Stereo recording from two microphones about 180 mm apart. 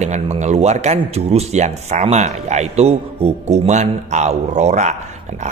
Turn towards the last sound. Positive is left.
turn(degrees=-40)  # may be behind; listen again after turning